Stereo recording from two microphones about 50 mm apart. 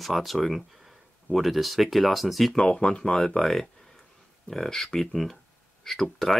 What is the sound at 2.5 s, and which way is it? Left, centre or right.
Speech, centre.